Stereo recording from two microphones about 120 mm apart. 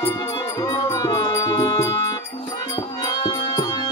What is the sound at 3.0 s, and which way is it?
Music, 35° left (ahead or behind).